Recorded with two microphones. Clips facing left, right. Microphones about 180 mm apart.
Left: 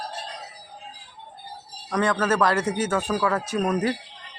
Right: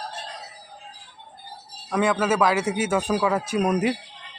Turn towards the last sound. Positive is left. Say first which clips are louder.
# right 2 dB
turn(degrees=-15)  # may be behind; listen again after turning